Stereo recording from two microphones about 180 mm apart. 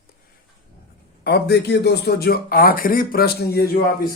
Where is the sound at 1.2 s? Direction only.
65° left (ahead or behind).